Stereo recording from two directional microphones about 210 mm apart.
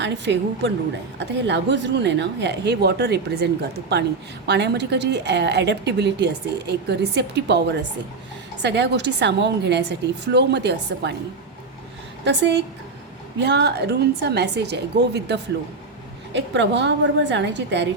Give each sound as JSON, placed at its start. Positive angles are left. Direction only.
{"t": 0.0, "sound": "a woman's voice", "side_deg": -55}
{"t": 12.2, "sound": "a woman's voice", "side_deg": -55}